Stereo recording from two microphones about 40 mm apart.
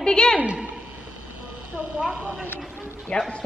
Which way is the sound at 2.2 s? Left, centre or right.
Right.